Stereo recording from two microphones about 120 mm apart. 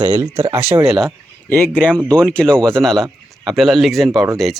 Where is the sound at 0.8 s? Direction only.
Centre (ahead or behind).